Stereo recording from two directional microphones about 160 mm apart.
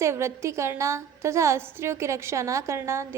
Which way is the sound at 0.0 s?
15° right (ahead or behind).